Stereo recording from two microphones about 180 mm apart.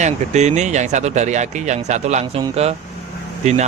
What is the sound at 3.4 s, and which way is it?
Speech, 40° right (ahead or behind).